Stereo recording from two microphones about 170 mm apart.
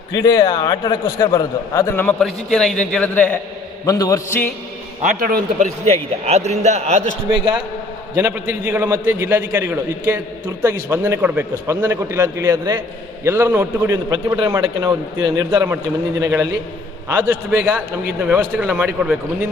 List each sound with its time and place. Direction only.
0.2 s a man's voice: 25° left (ahead or behind); by 3.3 s 10° left (ahead or behind)
3.8 s a man's voice: 20° left (ahead or behind)
5.2 s a man's voice: 50° right (ahead or behind)
8.1 s a man's voice: 15° right (ahead or behind)